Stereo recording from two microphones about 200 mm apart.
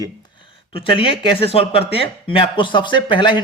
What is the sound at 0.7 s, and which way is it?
Speech, 25° left (ahead or behind).